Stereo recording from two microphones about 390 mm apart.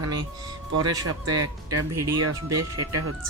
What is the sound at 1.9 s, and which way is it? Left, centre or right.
Speech, centre.